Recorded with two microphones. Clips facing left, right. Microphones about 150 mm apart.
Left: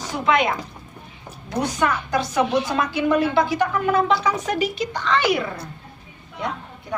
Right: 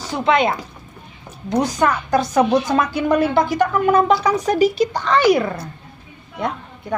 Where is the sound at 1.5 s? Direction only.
40° right (ahead or behind).